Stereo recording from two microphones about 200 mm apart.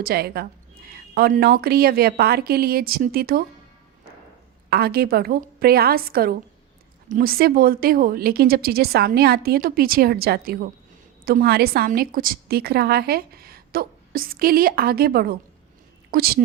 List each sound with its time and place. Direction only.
0.0 s a woman's voice: 50° right (ahead or behind)
4.7 s a woman's voice: 50° right (ahead or behind)